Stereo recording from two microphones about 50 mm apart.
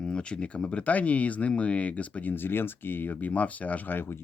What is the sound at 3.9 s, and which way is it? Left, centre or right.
Speech, left.